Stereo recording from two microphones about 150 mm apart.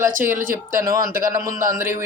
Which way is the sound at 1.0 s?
70° right (ahead or behind).